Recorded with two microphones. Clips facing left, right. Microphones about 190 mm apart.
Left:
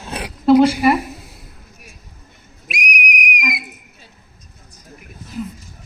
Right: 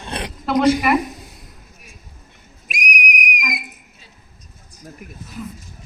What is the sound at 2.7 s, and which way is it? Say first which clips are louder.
Whistle: left 1 dB; 45° right (ahead or behind).